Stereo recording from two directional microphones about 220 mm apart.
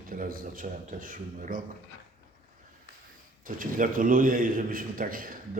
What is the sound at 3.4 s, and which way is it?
Speech, 40° right (ahead or behind).